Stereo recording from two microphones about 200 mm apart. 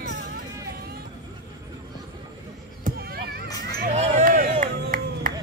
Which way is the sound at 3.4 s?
20° left (ahead or behind).